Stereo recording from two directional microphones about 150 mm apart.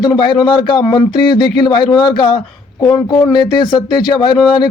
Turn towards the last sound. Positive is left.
turn(degrees=30)  # may be behind; listen again after turning